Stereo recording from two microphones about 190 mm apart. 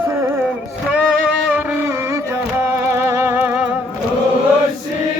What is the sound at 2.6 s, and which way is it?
Music, 15° right (ahead or behind).